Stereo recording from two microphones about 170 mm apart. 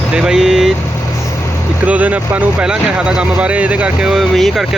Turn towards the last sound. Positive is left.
turn(degrees=0)  # may be behind; listen again after turning